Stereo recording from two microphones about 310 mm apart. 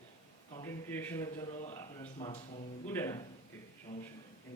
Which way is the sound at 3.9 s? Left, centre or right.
Centre.